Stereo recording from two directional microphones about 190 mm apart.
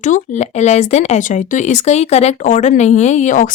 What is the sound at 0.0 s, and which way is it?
Speech, 40° left (ahead or behind).